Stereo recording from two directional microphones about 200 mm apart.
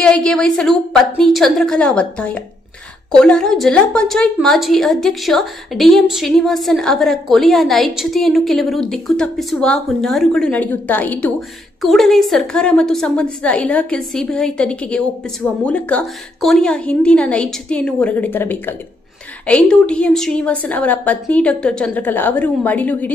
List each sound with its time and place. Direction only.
0.0 s a woman's voice: 5° left (ahead or behind)